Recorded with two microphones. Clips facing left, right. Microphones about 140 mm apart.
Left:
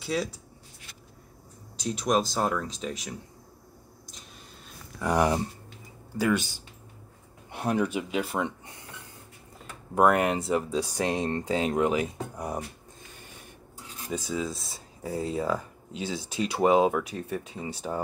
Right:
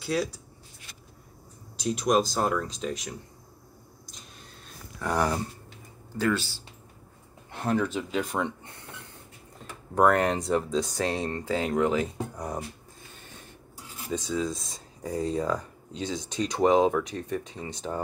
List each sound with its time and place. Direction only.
0.0 s speech: centre (ahead or behind)
1.8 s speech: centre (ahead or behind)
5.0 s speech: 15° left (ahead or behind)
9.9 s speech: 10° left (ahead or behind)
14.1 s speech: 10° left (ahead or behind)